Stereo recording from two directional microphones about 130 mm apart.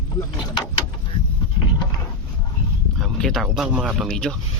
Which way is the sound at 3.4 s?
5° right (ahead or behind).